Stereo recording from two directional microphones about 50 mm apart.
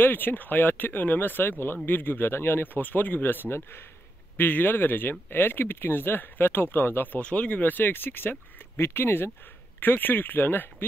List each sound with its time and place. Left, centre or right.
0.0 s speech: left
4.4 s speech: left
7.2 s speech: left